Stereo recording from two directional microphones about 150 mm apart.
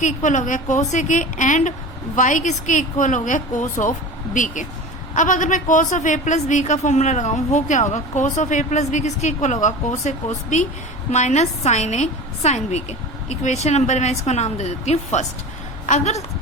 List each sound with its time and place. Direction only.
0.0 s a woman's voice: 55° left (ahead or behind)